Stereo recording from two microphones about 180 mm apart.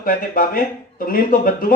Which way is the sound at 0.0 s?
50° left (ahead or behind).